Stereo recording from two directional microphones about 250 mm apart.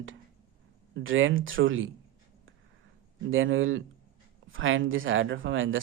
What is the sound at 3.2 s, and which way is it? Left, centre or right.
A man's voice, right.